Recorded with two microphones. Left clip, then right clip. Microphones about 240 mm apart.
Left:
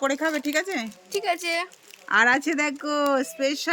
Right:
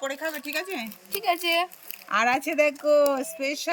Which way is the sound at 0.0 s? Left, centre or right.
Left.